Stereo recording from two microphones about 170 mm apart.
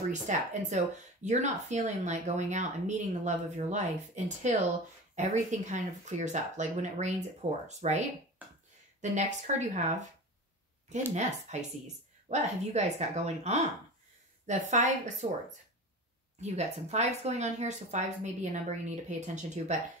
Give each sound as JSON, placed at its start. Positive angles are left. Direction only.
{"t": 0.1, "sound": "speech", "side_deg": -45}
{"t": 11.5, "sound": "speech", "side_deg": -40}
{"t": 16.3, "sound": "speech", "side_deg": -40}